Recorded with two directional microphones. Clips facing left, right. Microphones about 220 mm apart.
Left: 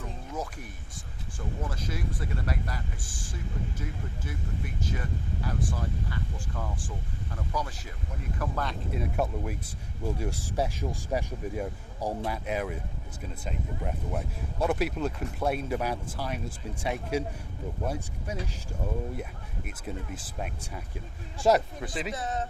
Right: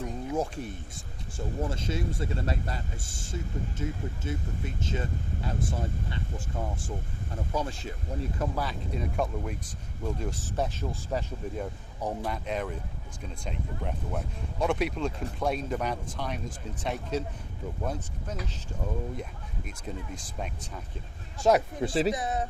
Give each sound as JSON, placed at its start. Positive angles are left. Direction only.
{"t": 0.3, "sound": "speech", "side_deg": -25}
{"t": 9.0, "sound": "speech", "side_deg": 5}
{"t": 21.8, "sound": "speech", "side_deg": -30}
{"t": 22.1, "sound": "speech", "side_deg": -15}